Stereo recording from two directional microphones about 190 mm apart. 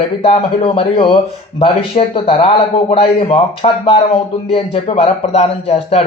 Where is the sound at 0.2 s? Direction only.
30° left (ahead or behind).